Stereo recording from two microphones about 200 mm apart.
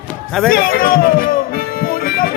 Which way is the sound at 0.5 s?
45° left (ahead or behind).